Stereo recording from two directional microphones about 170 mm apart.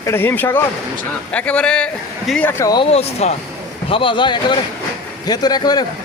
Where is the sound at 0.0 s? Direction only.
15° left (ahead or behind).